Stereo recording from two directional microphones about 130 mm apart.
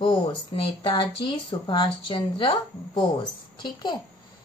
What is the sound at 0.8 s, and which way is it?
Speech, 40° left (ahead or behind).